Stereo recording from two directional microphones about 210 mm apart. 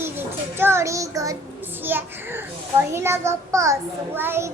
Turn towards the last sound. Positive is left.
turn(degrees=-10)  # may be behind; listen again after turning